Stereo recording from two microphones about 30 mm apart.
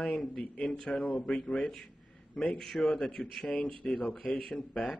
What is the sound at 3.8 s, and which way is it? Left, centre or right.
Speech, left.